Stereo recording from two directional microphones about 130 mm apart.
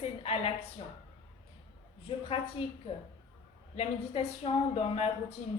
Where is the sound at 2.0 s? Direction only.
45° left (ahead or behind).